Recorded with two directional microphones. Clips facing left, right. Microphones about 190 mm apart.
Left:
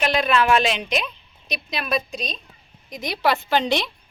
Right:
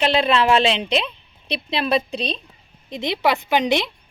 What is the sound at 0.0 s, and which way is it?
A woman's voice, 30° right (ahead or behind).